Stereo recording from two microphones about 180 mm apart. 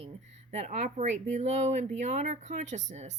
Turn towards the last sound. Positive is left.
turn(degrees=-40)  # may be behind; listen again after turning